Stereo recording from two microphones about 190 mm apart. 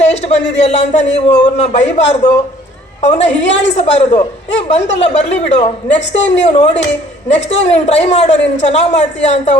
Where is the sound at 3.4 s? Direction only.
70° left (ahead or behind).